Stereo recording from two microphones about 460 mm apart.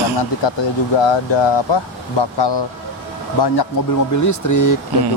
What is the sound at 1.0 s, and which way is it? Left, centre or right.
Speech, left.